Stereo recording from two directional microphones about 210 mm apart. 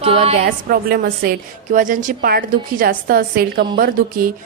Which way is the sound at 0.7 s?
45° right (ahead or behind).